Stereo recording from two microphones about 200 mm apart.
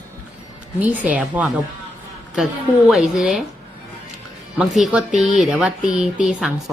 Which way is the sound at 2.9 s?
Centre (ahead or behind).